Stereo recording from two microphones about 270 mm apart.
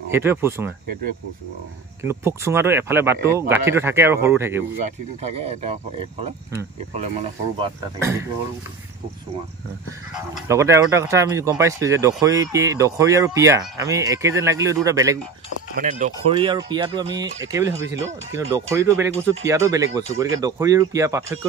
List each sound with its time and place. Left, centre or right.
0.1 s speech: centre
2.0 s speech: centre
5.2 s speech: right
7.5 s speech: centre
10.5 s speech: centre
15.7 s speech: right; by 21.4 s centre